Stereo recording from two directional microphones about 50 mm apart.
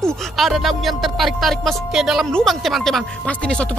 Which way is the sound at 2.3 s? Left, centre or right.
Centre.